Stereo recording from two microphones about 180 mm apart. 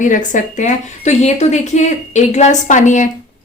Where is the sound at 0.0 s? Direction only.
45° left (ahead or behind).